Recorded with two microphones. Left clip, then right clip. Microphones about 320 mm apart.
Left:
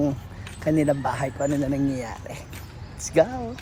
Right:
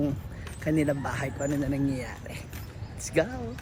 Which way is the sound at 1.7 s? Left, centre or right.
Left.